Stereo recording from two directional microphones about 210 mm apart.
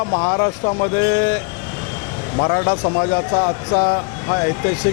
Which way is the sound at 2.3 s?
25° left (ahead or behind).